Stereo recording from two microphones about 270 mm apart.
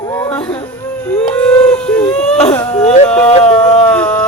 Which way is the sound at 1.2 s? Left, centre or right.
Centre.